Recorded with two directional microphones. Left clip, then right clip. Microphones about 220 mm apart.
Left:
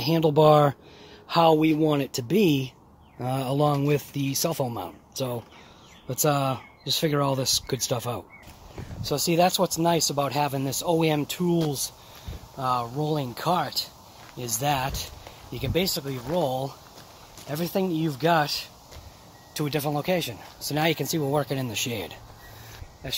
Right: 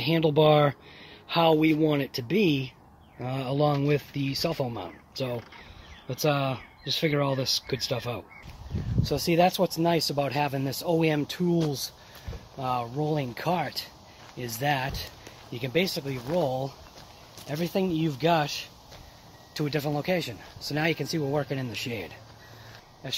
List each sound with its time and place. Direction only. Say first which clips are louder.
0.0 s speech: left 2 dB; 10° left (ahead or behind)
23.0 s speech: left 2 dB; 5° left (ahead or behind)